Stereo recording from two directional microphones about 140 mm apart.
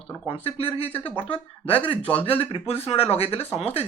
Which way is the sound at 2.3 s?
40° left (ahead or behind).